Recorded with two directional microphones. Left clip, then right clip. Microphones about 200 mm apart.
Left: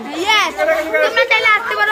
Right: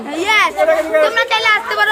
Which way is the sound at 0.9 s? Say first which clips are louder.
Even; 20° right (ahead or behind).